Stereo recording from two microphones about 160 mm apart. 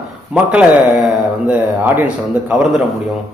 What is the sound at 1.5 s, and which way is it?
Mantra, 10° right (ahead or behind).